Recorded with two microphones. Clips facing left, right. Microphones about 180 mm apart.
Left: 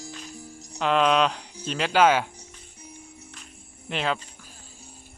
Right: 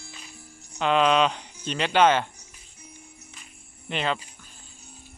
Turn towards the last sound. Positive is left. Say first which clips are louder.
# even
turn(degrees=0)  # may be behind; listen again after turning